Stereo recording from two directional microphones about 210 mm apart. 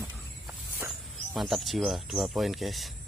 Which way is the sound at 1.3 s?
Centre (ahead or behind).